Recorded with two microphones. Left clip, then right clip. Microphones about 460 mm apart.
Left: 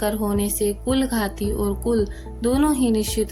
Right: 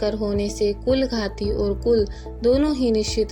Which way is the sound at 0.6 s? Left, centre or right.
Left.